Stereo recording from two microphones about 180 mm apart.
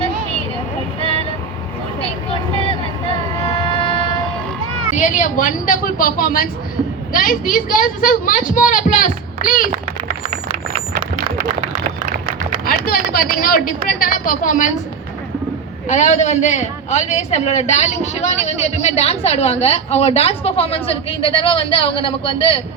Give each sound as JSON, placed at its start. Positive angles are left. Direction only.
{"t": 3.7, "sound": "train", "side_deg": 30}
{"t": 4.9, "sound": "speech", "side_deg": 45}
{"t": 12.6, "sound": "speech", "side_deg": 55}
{"t": 15.9, "sound": "a man's voice", "side_deg": 40}